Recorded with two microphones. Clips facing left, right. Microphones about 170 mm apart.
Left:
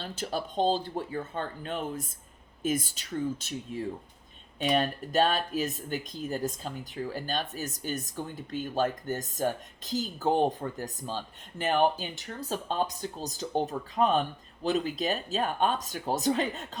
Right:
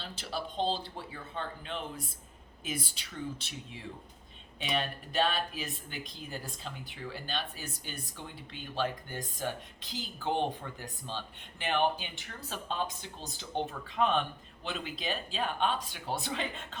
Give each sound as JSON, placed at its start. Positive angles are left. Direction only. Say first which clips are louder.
{"t": 0.0, "sound": "speech", "louder": "left 5 dB", "side_deg": 45}